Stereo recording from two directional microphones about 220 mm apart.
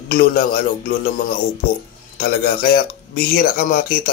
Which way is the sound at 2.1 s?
40° left (ahead or behind).